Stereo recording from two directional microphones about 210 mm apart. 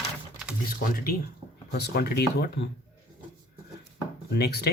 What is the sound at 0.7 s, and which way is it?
Speech, 45° left (ahead or behind).